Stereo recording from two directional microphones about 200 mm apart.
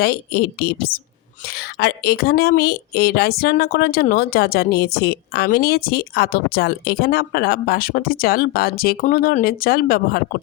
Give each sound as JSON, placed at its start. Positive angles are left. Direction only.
{"t": 0.0, "sound": "a woman's voice", "side_deg": 50}